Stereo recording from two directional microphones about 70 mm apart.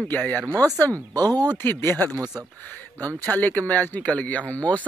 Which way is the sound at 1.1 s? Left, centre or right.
Right.